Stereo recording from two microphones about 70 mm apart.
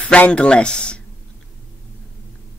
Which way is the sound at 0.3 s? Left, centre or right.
Centre.